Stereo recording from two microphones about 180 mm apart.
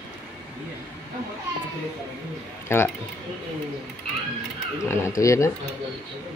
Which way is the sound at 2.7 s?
15° left (ahead or behind).